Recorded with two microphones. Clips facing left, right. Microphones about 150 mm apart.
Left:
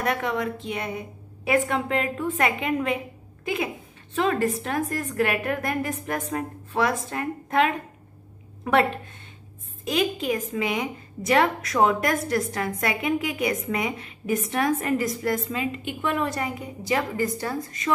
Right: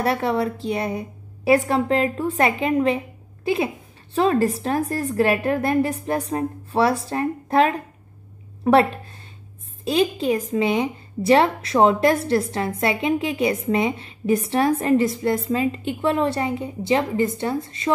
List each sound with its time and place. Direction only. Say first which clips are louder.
0.0 s a woman's voice: right 5 dB; 35° right (ahead or behind)